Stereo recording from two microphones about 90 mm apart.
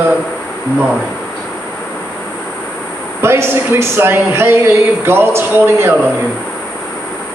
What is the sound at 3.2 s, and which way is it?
Speech, 30° right (ahead or behind).